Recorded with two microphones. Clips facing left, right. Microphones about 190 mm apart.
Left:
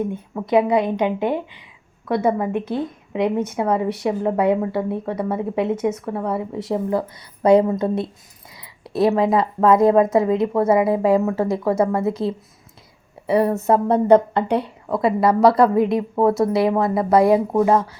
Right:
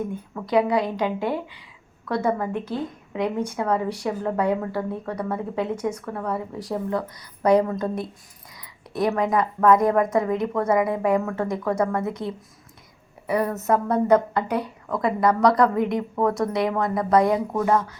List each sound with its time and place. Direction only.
0.1 s a woman's voice: 20° left (ahead or behind)